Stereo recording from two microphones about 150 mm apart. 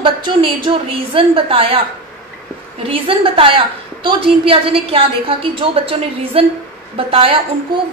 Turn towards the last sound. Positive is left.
turn(degrees=-35)  # may be behind; listen again after turning